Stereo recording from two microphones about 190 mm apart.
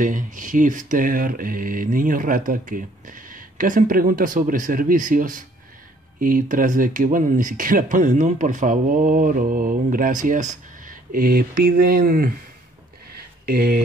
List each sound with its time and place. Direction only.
0.0 s speech: 45° right (ahead or behind)
13.5 s speech: 55° right (ahead or behind)